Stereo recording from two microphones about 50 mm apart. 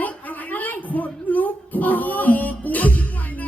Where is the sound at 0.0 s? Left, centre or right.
Left.